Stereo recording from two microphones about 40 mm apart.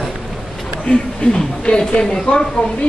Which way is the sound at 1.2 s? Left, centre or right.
Left.